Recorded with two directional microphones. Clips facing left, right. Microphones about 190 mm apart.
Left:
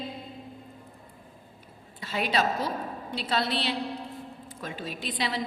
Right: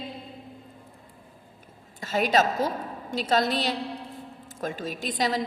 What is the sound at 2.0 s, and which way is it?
A woman's voice, 45° right (ahead or behind).